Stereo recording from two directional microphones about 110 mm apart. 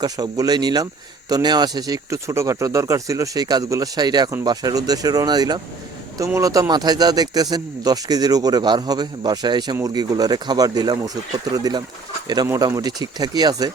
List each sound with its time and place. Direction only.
0.0 s speech: 35° right (ahead or behind)